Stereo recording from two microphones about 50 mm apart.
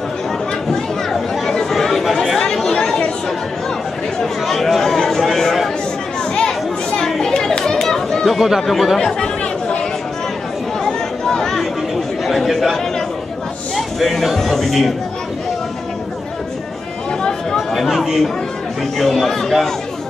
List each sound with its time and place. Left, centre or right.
1.3 s chatter: centre
4.2 s chatter: centre
6.3 s chatter: centre
8.4 s speech: centre
9.0 s chatter: centre
13.7 s speech: centre
17.7 s speech: centre